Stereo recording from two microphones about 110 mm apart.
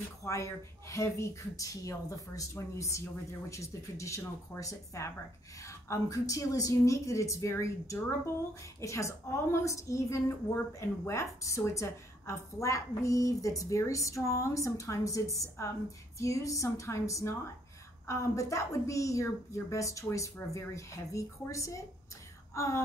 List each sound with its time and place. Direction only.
0.2 s speech: 25° left (ahead or behind)